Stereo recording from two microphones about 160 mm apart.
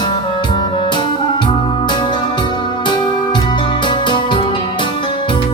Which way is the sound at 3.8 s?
30° left (ahead or behind).